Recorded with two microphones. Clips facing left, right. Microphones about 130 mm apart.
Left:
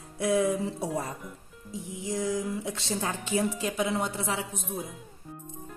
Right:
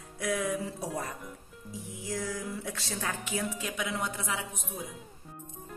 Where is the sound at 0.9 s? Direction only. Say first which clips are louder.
Left 4 dB; centre (ahead or behind).